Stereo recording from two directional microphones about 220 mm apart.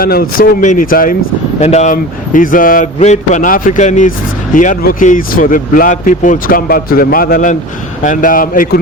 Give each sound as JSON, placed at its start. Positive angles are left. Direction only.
{"t": 0.0, "sound": "speech", "side_deg": 40}